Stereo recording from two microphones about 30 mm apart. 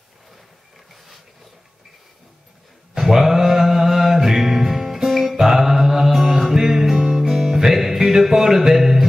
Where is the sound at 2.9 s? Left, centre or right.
Centre.